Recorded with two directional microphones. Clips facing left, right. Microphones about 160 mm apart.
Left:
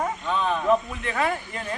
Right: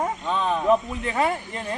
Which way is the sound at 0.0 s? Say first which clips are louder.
Right 1 dB; 20° right (ahead or behind).